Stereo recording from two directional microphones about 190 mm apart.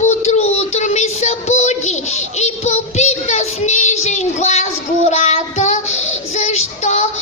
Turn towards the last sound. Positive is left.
turn(degrees=40)  # may be behind; listen again after turning